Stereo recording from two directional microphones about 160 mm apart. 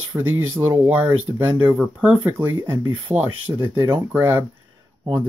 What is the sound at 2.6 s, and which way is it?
Speech, 20° right (ahead or behind).